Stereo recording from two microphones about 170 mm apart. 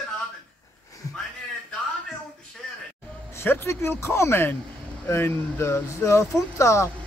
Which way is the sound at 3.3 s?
15° left (ahead or behind).